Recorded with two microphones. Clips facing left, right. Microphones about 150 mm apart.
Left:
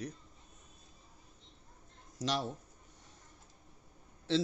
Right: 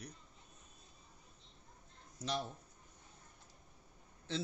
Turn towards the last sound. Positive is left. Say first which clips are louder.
# left 9 dB
turn(degrees=90)